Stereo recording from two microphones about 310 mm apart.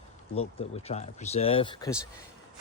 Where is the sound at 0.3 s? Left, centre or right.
Centre.